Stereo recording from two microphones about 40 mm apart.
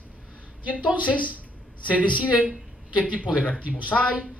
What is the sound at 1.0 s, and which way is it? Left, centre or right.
Speech, left.